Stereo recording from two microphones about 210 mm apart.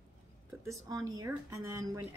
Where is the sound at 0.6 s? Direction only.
15° right (ahead or behind).